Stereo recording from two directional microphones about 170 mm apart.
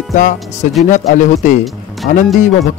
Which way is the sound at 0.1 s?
50° left (ahead or behind).